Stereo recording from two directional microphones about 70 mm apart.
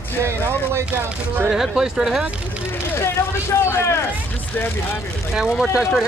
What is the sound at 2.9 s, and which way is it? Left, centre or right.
Speech, left.